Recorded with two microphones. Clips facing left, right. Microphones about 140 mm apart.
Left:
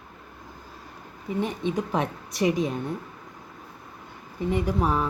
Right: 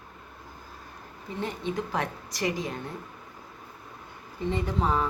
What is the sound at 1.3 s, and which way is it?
Speech, 20° left (ahead or behind).